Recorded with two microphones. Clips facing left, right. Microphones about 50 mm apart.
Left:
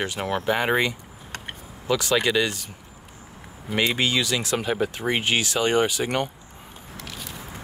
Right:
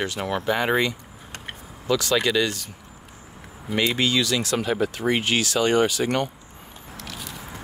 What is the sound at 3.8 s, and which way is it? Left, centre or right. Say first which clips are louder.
Speech: right 1 dB; centre.